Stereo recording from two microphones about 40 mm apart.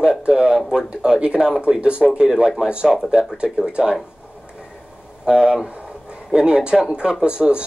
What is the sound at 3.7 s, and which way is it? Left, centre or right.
Speech, right.